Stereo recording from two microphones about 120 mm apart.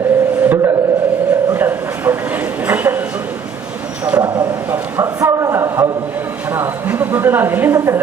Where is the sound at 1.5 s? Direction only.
15° right (ahead or behind).